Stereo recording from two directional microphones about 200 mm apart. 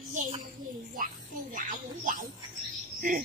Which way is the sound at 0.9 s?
40° right (ahead or behind).